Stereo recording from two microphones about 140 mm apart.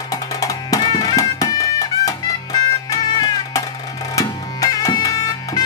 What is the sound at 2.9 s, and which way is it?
Music, 25° left (ahead or behind).